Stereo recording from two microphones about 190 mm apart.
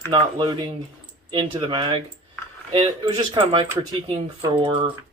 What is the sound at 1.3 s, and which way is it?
Speech, 25° right (ahead or behind).